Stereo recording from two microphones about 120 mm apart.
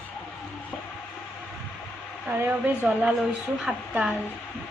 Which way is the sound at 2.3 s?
15° right (ahead or behind).